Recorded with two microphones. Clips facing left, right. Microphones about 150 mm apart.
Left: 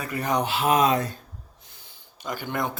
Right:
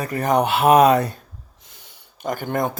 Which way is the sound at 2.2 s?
50° right (ahead or behind).